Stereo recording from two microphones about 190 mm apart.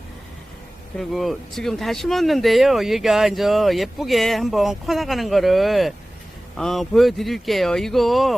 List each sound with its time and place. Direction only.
0.9 s speech: centre (ahead or behind)